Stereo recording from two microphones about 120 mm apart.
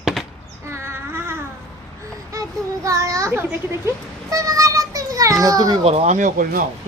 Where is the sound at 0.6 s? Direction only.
20° right (ahead or behind).